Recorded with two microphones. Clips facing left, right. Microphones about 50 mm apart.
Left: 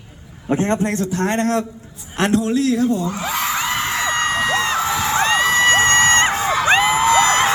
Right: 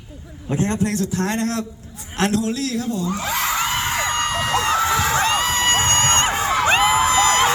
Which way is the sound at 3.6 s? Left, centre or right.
Centre.